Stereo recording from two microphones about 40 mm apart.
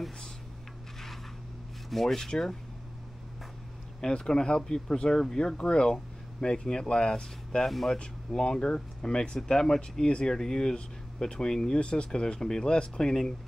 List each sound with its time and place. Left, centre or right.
1.9 s speech: centre
4.0 s speech: centre
7.6 s speech: centre
8.3 s speech: centre